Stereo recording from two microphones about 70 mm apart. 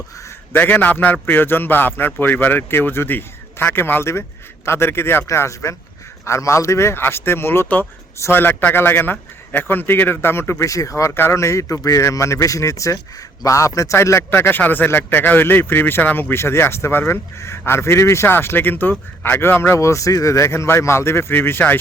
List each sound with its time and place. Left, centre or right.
0.5 s a man's voice: left
10.7 s speech: left
14.3 s speech: left